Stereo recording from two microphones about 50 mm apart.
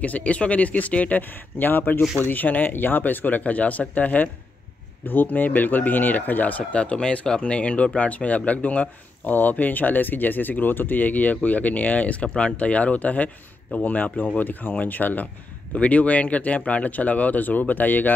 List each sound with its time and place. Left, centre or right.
0.0 s speech: left
6.7 s speech: left
15.7 s speech: left